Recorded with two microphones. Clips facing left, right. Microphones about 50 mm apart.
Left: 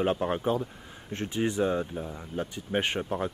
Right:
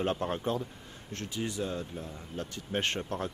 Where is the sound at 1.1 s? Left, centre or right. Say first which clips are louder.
Left 7 dB; left.